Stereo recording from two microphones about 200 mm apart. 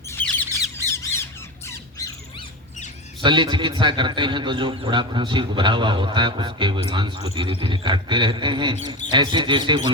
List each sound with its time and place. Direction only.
0.1 s squawk: 10° left (ahead or behind)
3.2 s a man's voice: 25° right (ahead or behind)